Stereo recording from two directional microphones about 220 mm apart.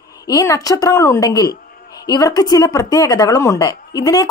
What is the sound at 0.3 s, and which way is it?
A woman's voice, 15° left (ahead or behind).